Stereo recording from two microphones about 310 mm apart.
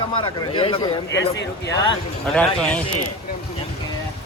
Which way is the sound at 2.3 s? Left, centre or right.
Centre.